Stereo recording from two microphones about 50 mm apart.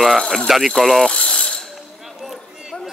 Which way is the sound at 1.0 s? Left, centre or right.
Centre.